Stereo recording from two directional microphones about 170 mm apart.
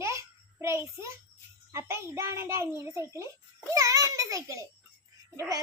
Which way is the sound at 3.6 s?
20° right (ahead or behind).